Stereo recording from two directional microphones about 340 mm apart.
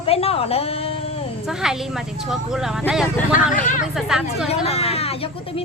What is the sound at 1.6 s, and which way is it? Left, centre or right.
Speech, centre.